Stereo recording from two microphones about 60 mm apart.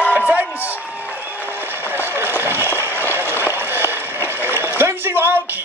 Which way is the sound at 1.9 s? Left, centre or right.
Right.